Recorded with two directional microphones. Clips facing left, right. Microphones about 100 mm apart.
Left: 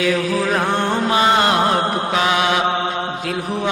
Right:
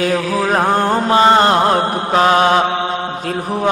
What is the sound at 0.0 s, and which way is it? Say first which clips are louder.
Mantra: right 2 dB; 40° right (ahead or behind).